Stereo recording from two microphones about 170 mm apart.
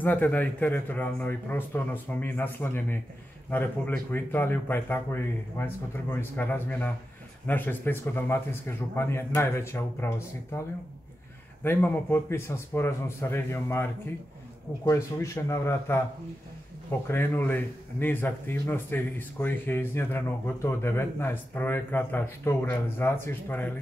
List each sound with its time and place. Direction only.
0.0 s a man's voice: 10° left (ahead or behind)
11.6 s a man's voice: 10° left (ahead or behind)
14.9 s a man's voice: 20° left (ahead or behind)